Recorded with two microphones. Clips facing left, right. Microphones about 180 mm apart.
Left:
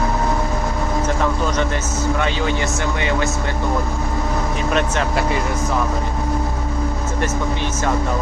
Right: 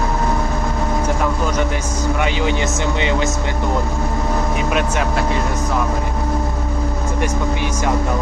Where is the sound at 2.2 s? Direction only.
15° right (ahead or behind).